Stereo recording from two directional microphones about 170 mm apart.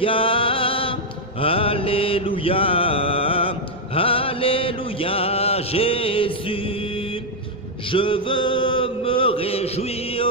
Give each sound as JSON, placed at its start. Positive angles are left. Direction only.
{"t": 0.0, "sound": "music", "side_deg": 30}
{"t": 1.4, "sound": "mantra", "side_deg": 35}
{"t": 7.9, "sound": "chant", "side_deg": 30}